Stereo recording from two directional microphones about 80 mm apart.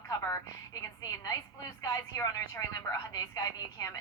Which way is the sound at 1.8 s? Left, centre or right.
Left.